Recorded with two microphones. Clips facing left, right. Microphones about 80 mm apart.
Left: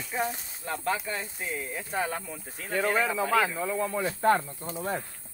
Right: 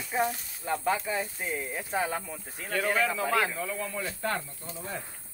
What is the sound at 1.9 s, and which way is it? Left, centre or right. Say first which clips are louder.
Speech: right 1 dB; centre.